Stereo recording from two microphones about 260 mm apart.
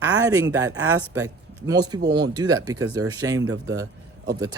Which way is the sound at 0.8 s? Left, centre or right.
Right.